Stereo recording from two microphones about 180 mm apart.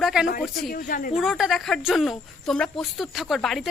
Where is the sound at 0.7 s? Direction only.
50° left (ahead or behind).